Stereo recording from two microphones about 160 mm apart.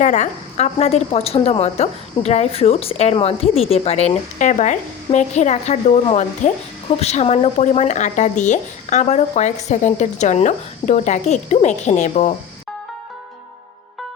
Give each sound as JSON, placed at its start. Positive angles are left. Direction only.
{"t": 0.0, "sound": "a woman's voice", "side_deg": 50}